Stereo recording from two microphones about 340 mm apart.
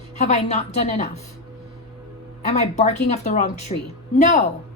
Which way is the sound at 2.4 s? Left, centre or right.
Centre.